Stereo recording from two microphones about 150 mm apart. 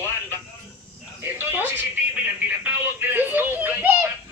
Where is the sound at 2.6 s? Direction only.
10° right (ahead or behind).